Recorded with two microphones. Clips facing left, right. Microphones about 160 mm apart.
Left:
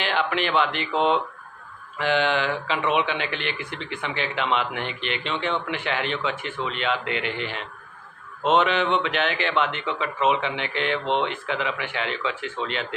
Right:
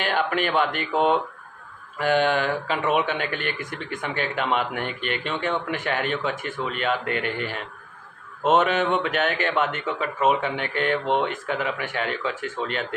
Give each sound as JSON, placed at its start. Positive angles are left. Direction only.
{"t": 0.0, "sound": "speech", "side_deg": -45}